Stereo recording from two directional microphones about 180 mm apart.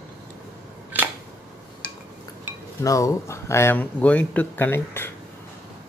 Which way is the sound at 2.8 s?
20° left (ahead or behind).